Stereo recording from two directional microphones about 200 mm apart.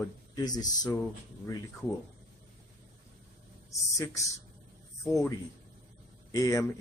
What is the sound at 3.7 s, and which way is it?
A man's voice, 15° left (ahead or behind).